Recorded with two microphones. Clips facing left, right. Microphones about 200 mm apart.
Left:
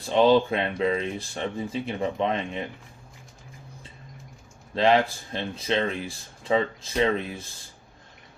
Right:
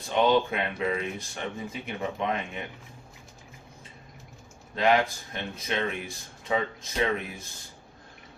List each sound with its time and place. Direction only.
0.1 s speech: 30° left (ahead or behind)
4.7 s speech: 30° left (ahead or behind)